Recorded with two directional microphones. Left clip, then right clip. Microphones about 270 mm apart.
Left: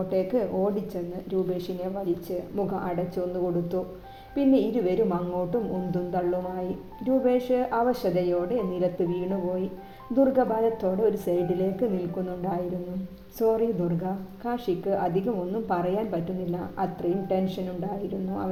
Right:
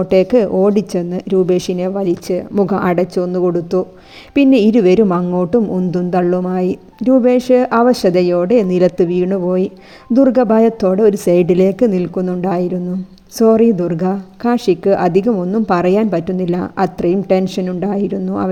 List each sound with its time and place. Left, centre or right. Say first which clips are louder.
0.1 s speech: right 15 dB; right